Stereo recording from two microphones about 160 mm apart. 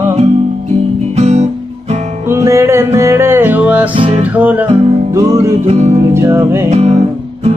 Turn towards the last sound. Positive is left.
turn(degrees=-15)  # may be behind; listen again after turning